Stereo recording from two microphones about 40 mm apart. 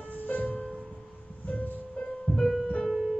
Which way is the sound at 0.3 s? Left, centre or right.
Left.